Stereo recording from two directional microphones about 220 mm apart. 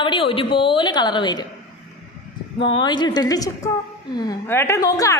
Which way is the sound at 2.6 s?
20° left (ahead or behind).